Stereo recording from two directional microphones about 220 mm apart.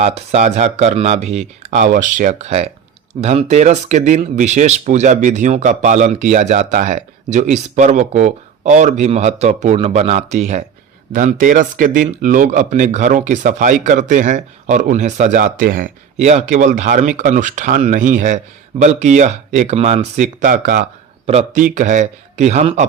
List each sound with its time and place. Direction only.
0.0 s speech: 30° right (ahead or behind)